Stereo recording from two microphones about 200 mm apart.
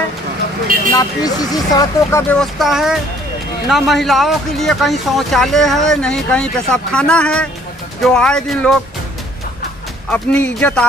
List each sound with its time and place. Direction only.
0.9 s speech: 20° left (ahead or behind)
2.3 s speech: centre (ahead or behind)
10.0 s speech: 5° left (ahead or behind)